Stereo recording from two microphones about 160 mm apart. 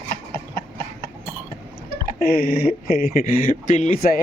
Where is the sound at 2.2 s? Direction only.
70° left (ahead or behind).